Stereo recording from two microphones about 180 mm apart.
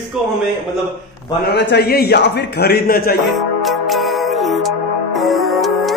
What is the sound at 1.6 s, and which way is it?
A man's voice, 70° left (ahead or behind).